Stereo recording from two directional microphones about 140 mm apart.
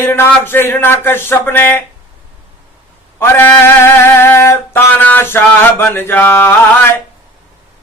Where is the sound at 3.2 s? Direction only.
15° left (ahead or behind).